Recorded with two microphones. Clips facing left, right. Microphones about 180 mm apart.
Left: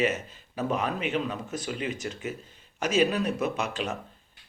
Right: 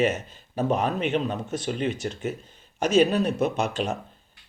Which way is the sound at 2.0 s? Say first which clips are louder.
Right 4 dB; 40° right (ahead or behind).